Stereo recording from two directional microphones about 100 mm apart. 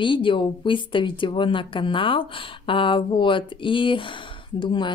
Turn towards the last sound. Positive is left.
turn(degrees=50)  # may be behind; listen again after turning